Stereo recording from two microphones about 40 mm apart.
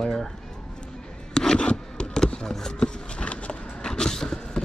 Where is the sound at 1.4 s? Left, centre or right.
Left.